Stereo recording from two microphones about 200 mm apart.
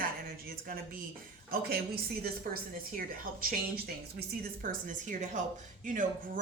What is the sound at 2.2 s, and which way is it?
A woman's voice, 45° right (ahead or behind).